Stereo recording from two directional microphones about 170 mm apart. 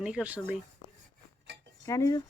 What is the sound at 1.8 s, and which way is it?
Speech, 20° left (ahead or behind).